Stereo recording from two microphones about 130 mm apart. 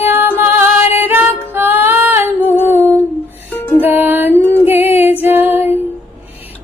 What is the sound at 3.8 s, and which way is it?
Music, 15° right (ahead or behind).